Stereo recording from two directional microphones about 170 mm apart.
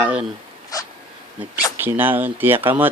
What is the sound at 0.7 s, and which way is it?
Dog, 20° left (ahead or behind).